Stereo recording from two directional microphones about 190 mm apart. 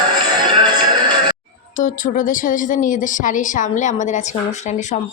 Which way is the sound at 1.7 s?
45° left (ahead or behind).